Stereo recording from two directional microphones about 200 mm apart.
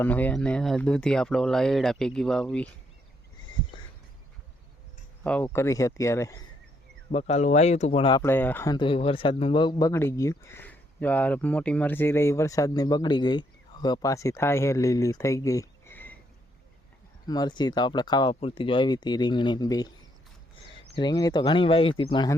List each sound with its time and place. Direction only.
0.0 s speech: 10° left (ahead or behind)
5.2 s speech: 5° left (ahead or behind)
7.1 s speech: 30° left (ahead or behind)
8.2 s speech: 10° left (ahead or behind)
8.7 s speech: 25° left (ahead or behind)
17.2 s speech: 20° left (ahead or behind)
20.9 s speech: 20° left (ahead or behind)